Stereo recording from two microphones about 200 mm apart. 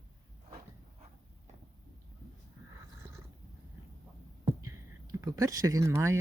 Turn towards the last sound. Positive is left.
turn(degrees=-15)  # may be behind; listen again after turning